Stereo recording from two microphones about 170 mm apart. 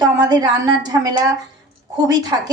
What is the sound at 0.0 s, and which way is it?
A woman's voice, 25° right (ahead or behind).